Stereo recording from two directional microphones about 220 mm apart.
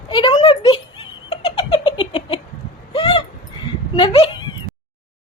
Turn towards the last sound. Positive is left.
turn(degrees=25)  # may be behind; listen again after turning